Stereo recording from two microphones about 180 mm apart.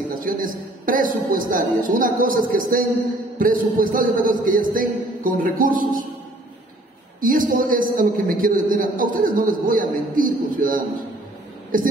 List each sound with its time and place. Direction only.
0.2 s a man's voice: 50° right (ahead or behind)
7.2 s a man's voice: 50° right (ahead or behind)